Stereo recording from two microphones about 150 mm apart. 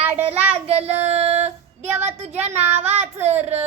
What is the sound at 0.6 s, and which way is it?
Child singing, 45° right (ahead or behind).